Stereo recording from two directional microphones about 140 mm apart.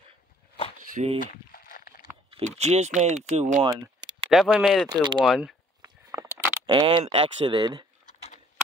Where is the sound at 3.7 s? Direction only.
30° right (ahead or behind).